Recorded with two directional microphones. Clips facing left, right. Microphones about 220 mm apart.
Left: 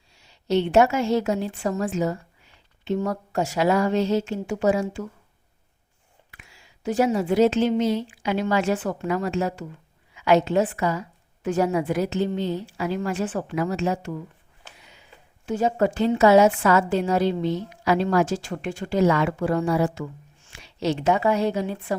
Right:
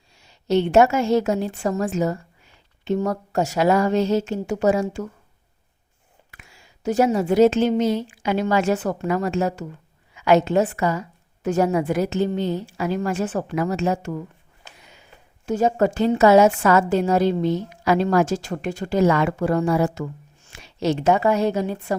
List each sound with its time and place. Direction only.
0.2 s a woman's voice: 45° right (ahead or behind)
6.3 s a woman's voice: 45° right (ahead or behind)
15.4 s a woman's voice: 45° right (ahead or behind)